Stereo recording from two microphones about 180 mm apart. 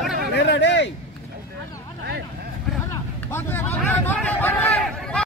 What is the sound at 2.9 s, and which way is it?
Speech, 15° left (ahead or behind).